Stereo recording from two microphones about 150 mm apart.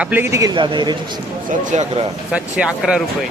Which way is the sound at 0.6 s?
30° right (ahead or behind).